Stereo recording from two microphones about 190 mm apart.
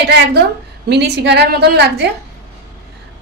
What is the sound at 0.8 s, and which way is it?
A woman's voice, 60° right (ahead or behind).